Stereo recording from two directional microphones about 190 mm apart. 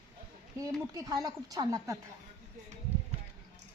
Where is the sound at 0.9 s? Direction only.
20° right (ahead or behind).